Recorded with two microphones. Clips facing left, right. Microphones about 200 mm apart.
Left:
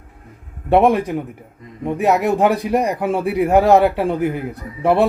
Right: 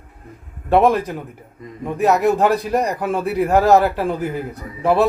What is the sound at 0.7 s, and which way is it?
Speech, 15° left (ahead or behind).